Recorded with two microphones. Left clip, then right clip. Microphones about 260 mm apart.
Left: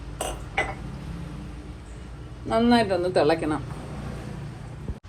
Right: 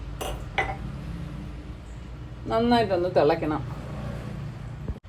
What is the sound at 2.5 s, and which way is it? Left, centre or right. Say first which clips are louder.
A woman's voice: left 1 dB; left.